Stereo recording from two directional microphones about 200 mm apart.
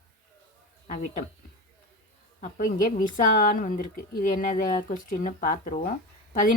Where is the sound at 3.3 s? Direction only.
40° left (ahead or behind).